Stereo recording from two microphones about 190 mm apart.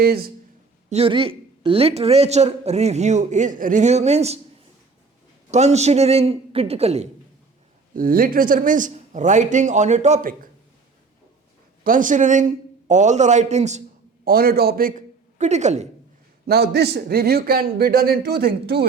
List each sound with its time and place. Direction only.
0.0 s a man's voice: 55° right (ahead or behind)
0.9 s speech: 30° right (ahead or behind)
5.5 s speech: 35° right (ahead or behind)
7.9 s speech: 50° right (ahead or behind)
11.8 s speech: 45° right (ahead or behind)
14.3 s a man's voice: 50° right (ahead or behind)
16.5 s a man's voice: 60° right (ahead or behind)